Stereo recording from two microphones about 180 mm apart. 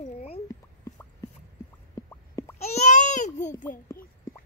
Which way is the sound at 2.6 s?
40° left (ahead or behind).